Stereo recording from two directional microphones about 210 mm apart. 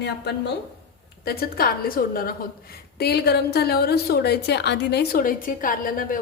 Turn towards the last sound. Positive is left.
turn(degrees=40)  # may be behind; listen again after turning